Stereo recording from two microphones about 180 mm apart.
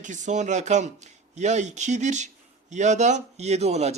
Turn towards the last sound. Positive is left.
turn(degrees=-35)  # may be behind; listen again after turning